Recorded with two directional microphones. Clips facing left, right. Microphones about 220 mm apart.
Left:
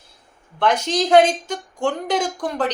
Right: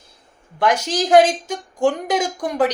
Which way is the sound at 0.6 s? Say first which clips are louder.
Even; 10° right (ahead or behind).